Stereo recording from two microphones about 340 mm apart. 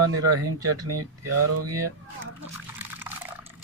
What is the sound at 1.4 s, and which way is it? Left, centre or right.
Speech, right.